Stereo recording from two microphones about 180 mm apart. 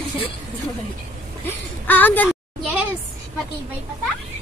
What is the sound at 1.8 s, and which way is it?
Speech, 10° left (ahead or behind).